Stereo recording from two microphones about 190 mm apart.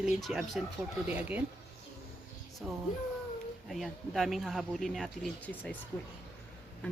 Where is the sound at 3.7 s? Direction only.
Centre (ahead or behind).